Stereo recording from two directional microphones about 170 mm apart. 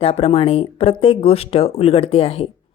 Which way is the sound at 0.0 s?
35° left (ahead or behind).